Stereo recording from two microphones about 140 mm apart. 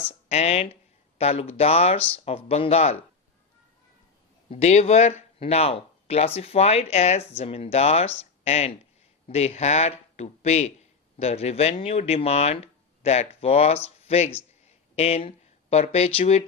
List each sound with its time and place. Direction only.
0.3 s speech: 50° left (ahead or behind)
4.4 s speech: 50° left (ahead or behind)